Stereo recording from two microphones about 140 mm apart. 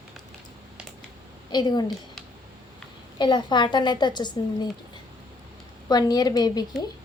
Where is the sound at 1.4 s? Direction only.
30° left (ahead or behind).